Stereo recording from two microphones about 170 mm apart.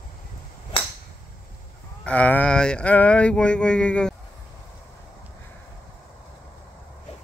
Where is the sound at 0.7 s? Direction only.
30° left (ahead or behind).